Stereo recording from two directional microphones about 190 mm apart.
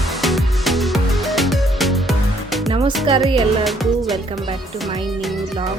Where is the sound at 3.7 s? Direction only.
Centre (ahead or behind).